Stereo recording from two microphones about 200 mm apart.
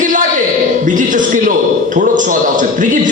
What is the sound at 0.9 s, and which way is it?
A man's voice, 40° right (ahead or behind).